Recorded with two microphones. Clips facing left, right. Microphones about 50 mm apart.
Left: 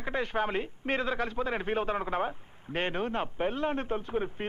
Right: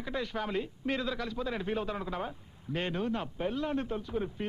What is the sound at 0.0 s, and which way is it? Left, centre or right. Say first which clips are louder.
A man's voice: left 4 dB; left.